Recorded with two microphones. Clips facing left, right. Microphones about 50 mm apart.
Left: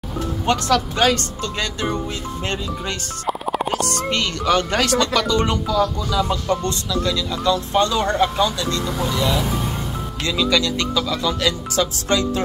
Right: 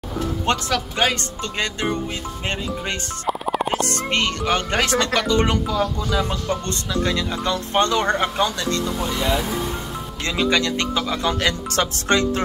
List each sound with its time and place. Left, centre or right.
0.7 s speech: centre
3.3 s music: centre
3.7 s speech: right
6.6 s speech: right